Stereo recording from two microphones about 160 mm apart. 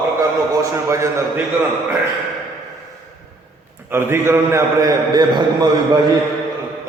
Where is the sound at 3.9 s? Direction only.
15° right (ahead or behind).